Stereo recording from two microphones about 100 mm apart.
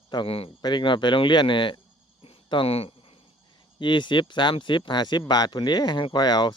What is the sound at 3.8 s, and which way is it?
A man's voice, 50° left (ahead or behind).